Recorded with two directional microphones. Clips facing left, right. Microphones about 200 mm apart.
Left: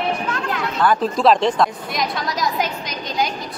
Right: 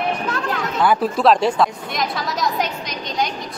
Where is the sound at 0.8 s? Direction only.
5° right (ahead or behind).